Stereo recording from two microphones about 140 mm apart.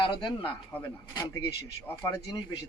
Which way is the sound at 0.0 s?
35° left (ahead or behind).